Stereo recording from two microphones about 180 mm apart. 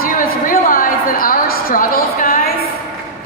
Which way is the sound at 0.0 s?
50° left (ahead or behind).